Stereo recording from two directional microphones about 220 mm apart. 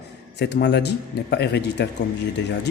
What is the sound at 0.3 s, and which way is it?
A man's voice, 50° left (ahead or behind).